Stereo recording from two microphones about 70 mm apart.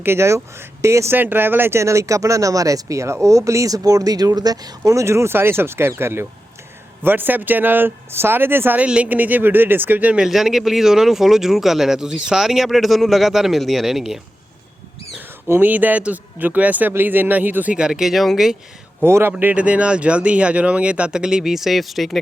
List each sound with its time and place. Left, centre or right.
0.0 s speech: right
1.1 s speech: right
4.9 s speech: right
8.8 s speech: centre
10.2 s speech: centre
15.4 s speech: right
17.7 s speech: centre
19.0 s speech: right
19.3 s speech: right; by 22.2 s centre